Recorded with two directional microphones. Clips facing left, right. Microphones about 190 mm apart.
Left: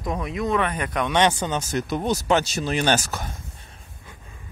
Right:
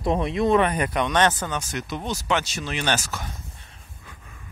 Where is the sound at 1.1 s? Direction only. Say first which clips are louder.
Left 3 dB; 15° left (ahead or behind).